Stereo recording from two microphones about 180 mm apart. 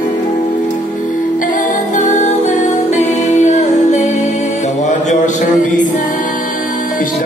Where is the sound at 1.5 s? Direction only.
45° left (ahead or behind).